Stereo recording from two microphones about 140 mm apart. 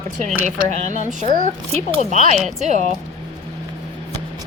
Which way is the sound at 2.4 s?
Centre (ahead or behind).